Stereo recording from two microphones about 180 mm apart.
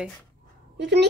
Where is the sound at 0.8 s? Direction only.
70° right (ahead or behind).